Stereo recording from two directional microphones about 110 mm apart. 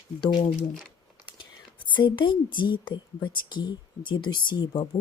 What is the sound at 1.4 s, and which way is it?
A woman's voice, 45° left (ahead or behind).